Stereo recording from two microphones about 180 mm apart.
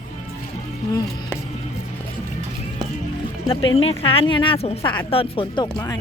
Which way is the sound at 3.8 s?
35° left (ahead or behind).